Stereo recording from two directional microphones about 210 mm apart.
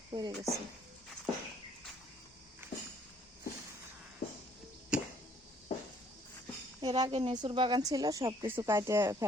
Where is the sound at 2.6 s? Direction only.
10° right (ahead or behind).